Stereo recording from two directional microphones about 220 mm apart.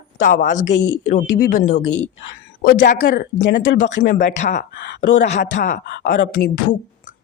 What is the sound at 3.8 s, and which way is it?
Speech, 50° left (ahead or behind).